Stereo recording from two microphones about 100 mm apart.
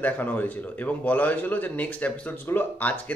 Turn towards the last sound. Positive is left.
turn(degrees=15)  # may be behind; listen again after turning